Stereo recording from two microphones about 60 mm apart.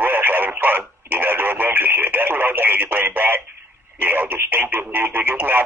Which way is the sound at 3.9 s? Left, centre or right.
Right.